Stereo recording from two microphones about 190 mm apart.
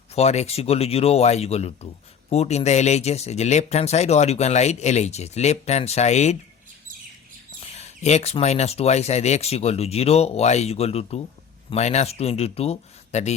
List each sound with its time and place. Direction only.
0.1 s speech: 35° left (ahead or behind)
7.6 s speech: 35° left (ahead or behind)